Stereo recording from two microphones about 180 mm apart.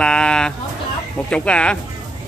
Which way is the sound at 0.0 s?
5° left (ahead or behind).